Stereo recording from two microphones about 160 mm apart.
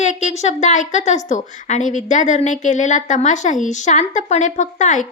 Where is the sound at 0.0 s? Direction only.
45° left (ahead or behind).